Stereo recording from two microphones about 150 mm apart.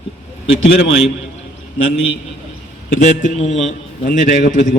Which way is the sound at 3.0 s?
55° left (ahead or behind).